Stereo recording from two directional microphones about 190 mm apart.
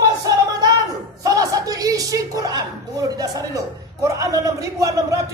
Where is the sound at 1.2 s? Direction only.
20° right (ahead or behind).